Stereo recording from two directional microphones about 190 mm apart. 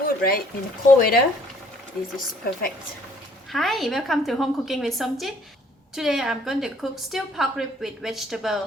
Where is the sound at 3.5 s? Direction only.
Centre (ahead or behind).